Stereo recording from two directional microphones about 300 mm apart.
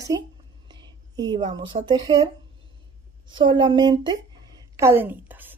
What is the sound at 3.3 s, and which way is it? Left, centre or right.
A woman's voice, centre.